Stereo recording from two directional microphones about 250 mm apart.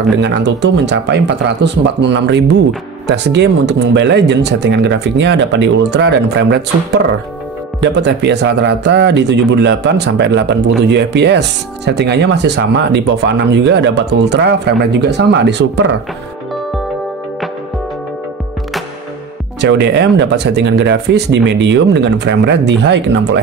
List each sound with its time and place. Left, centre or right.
0.2 s speech: right
19.6 s speech: right